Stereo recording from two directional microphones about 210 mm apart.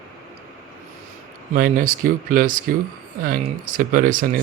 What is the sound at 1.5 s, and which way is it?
Speech, 40° right (ahead or behind).